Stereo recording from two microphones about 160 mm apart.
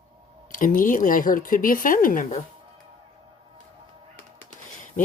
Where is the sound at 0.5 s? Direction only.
55° left (ahead or behind).